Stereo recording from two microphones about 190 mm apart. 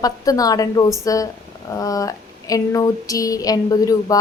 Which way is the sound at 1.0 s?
20° left (ahead or behind).